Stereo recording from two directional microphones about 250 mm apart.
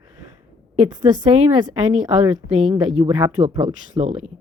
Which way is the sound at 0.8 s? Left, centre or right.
Centre.